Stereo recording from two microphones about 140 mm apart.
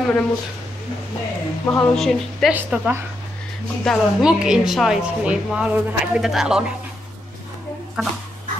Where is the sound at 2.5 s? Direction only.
10° right (ahead or behind).